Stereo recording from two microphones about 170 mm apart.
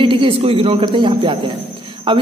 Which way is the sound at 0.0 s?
30° right (ahead or behind).